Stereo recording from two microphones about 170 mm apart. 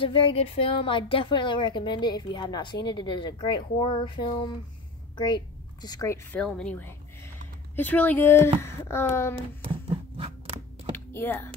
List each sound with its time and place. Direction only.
0.0 s a woman's voice: 30° left (ahead or behind)
6.4 s a woman's voice: 5° left (ahead or behind)
9.3 s a sound: 30° right (ahead or behind)
11.1 s speech: 15° left (ahead or behind)